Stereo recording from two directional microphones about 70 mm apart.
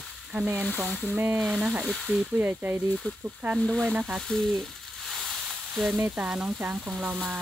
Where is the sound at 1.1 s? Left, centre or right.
Right.